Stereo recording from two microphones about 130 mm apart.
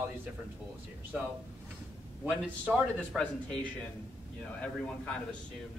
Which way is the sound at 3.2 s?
10° left (ahead or behind).